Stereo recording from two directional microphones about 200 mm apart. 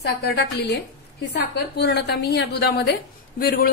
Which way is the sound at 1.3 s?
55° left (ahead or behind).